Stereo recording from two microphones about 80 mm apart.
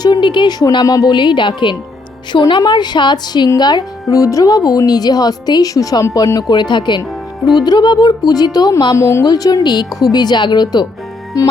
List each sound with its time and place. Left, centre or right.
0.0 s speech: left
0.7 s speech: left
1.1 s a woman's voice: left
2.6 s speech: left
3.6 s speech: left
6.5 s speech: left
9.0 s a woman's voice: left
9.2 s speech: left
11.3 s speech: left